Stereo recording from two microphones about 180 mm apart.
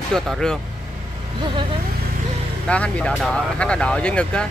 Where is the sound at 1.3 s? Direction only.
25° right (ahead or behind).